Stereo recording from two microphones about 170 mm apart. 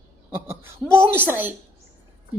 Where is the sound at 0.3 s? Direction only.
15° right (ahead or behind).